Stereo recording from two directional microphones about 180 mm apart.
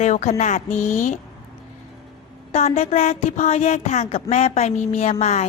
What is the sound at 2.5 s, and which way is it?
Speech, 35° left (ahead or behind).